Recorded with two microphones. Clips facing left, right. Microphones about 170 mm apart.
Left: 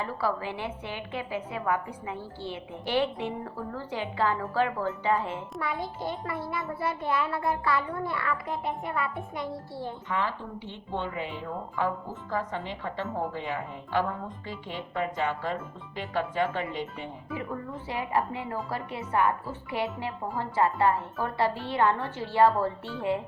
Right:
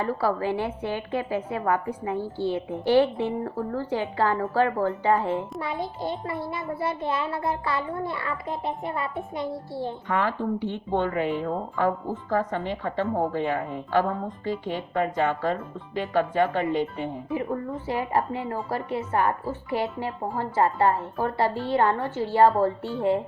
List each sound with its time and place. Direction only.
0.0 s a woman's voice: 45° right (ahead or behind)
5.5 s a child's voice: 25° right (ahead or behind)
10.1 s a woman's voice: 55° right (ahead or behind)
17.3 s a woman's voice: 40° right (ahead or behind)